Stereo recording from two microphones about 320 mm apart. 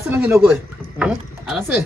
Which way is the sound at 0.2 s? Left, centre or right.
Centre.